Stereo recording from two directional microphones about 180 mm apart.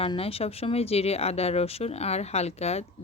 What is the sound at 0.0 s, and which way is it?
Speech, 30° left (ahead or behind).